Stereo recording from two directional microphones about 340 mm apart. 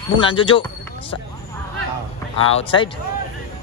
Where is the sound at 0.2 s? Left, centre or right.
Centre.